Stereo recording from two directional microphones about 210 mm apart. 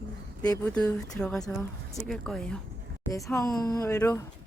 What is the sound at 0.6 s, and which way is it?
Speech, 5° left (ahead or behind).